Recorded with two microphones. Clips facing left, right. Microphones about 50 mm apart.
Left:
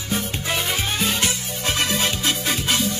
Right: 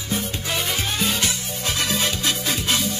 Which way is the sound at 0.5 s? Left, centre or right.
Centre.